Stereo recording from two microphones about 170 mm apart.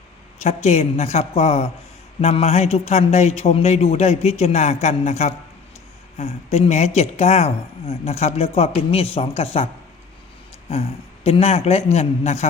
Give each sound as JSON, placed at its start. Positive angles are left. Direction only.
{"t": 0.4, "sound": "speech", "side_deg": 40}
{"t": 10.7, "sound": "speech", "side_deg": 35}